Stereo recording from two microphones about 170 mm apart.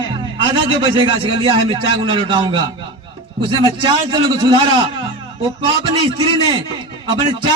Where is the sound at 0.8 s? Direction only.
30° right (ahead or behind).